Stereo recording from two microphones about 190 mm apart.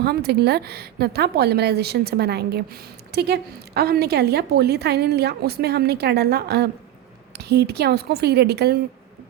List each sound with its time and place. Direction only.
0.0 s speech: 60° right (ahead or behind)